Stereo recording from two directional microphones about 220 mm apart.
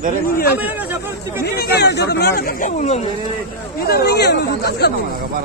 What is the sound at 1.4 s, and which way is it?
Speech, 45° left (ahead or behind).